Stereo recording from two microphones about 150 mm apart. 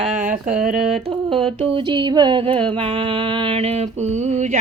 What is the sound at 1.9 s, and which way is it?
Music, 30° right (ahead or behind).